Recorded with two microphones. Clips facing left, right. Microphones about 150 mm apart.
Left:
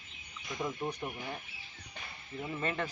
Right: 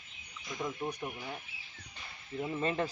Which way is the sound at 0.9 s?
10° right (ahead or behind).